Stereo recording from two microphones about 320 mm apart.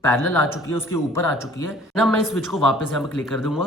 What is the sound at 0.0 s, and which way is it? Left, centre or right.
A man's voice, centre.